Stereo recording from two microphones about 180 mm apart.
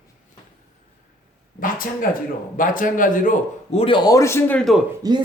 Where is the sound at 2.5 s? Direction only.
50° left (ahead or behind).